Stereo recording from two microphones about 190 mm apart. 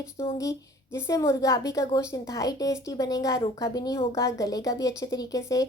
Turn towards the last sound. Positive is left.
turn(degrees=20)  # may be behind; listen again after turning